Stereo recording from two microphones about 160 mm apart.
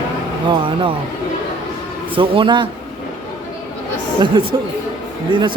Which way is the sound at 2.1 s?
35° right (ahead or behind).